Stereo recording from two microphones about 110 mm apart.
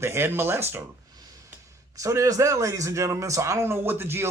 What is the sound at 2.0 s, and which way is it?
A man's voice, 30° right (ahead or behind).